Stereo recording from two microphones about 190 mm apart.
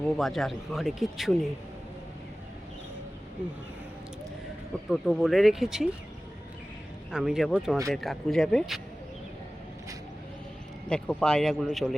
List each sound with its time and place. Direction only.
0.2 s speech: centre (ahead or behind)
4.9 s speech: centre (ahead or behind)
7.1 s speech: centre (ahead or behind)
10.8 s speech: 5° left (ahead or behind)